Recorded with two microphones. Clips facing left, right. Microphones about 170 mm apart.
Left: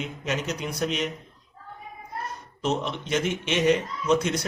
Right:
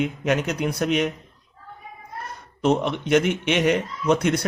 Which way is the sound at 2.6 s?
60° right (ahead or behind).